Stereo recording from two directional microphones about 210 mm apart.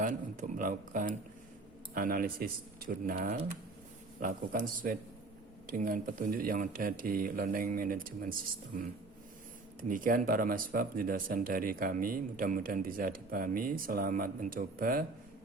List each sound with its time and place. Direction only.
0.0 s speech: 40° right (ahead or behind)
9.9 s speech: 40° right (ahead or behind)